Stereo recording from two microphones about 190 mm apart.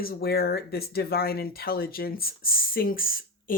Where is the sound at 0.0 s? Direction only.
50° left (ahead or behind).